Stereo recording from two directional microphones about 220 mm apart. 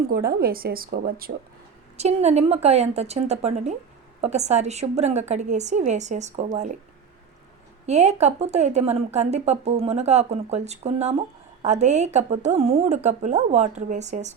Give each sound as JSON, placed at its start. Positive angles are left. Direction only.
{"t": 0.1, "sound": "speech", "side_deg": -45}
{"t": 2.0, "sound": "a woman's voice", "side_deg": -30}
{"t": 7.9, "sound": "a woman's voice", "side_deg": -30}